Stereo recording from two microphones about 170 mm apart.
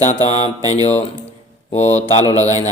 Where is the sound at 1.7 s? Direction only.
40° left (ahead or behind).